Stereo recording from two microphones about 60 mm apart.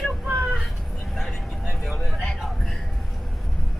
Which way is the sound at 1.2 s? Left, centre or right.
Centre.